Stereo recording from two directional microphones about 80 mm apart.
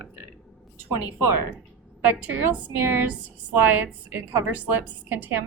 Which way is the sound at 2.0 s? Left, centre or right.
Right.